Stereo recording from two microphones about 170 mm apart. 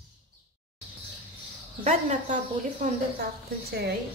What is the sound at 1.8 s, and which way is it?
Speech, 45° right (ahead or behind).